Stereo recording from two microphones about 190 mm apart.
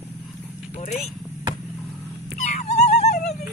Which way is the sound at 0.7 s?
35° left (ahead or behind).